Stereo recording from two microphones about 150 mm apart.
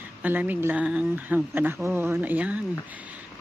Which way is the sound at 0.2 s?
10° right (ahead or behind).